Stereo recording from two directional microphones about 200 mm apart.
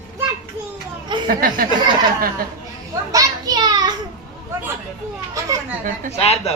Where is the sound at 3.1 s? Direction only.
20° right (ahead or behind).